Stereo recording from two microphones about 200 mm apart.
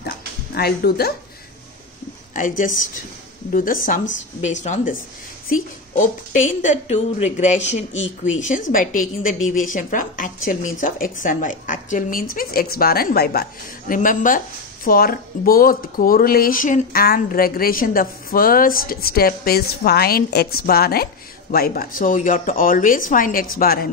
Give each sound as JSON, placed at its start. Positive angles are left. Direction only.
{"t": 0.6, "sound": "speech", "side_deg": 50}
{"t": 2.3, "sound": "a woman's voice", "side_deg": 40}